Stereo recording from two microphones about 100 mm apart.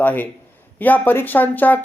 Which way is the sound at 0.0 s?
15° left (ahead or behind).